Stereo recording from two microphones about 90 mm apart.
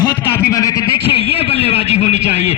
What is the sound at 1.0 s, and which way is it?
Speech, 90° left.